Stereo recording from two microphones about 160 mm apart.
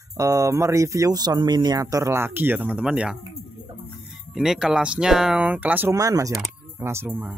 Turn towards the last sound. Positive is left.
turn(degrees=-15)  # may be behind; listen again after turning